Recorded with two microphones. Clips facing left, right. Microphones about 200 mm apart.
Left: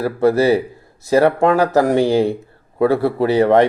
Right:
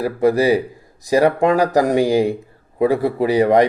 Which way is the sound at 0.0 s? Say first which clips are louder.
Left 1 dB; 15° right (ahead or behind).